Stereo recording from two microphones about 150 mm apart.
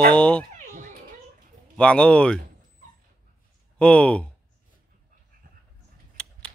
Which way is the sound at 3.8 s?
5° left (ahead or behind).